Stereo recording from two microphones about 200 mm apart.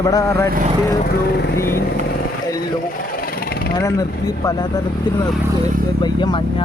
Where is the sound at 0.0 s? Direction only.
15° left (ahead or behind).